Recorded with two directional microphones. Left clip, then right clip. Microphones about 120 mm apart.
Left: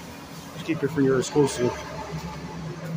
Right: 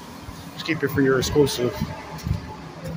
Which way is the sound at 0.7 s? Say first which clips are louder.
Right 3 dB; 10° left (ahead or behind).